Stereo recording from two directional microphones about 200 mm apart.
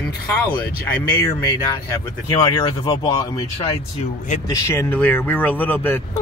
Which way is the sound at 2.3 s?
25° left (ahead or behind).